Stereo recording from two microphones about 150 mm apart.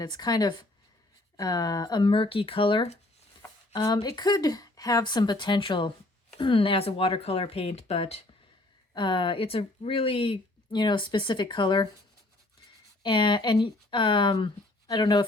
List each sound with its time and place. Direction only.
0.0 s speech: 25° left (ahead or behind)
3.8 s speech: 25° left (ahead or behind)
13.0 s speech: 35° left (ahead or behind)